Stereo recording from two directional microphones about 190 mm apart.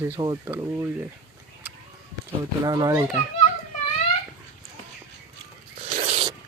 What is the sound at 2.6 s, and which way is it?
Speech, 20° right (ahead or behind).